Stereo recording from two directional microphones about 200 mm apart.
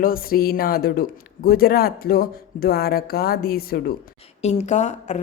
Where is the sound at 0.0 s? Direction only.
45° left (ahead or behind).